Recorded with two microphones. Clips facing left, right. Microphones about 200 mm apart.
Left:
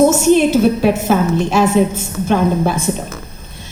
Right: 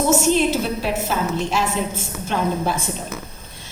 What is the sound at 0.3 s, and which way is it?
A woman's voice, 55° left (ahead or behind).